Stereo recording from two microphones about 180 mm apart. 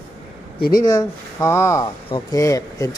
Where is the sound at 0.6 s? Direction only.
55° left (ahead or behind).